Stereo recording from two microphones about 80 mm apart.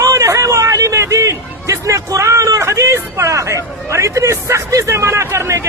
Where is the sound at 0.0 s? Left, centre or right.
Right.